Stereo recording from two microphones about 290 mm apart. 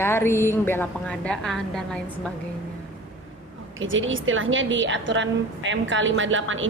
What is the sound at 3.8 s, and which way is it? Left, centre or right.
A woman's voice, right.